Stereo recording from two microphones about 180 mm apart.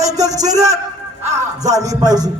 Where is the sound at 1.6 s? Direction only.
20° right (ahead or behind).